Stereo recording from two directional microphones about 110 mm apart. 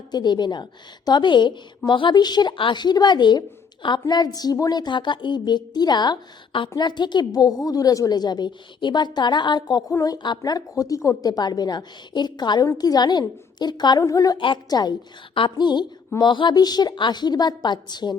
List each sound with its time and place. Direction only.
0.1 s a woman's voice: 40° left (ahead or behind)
14.3 s a woman's voice: 45° left (ahead or behind)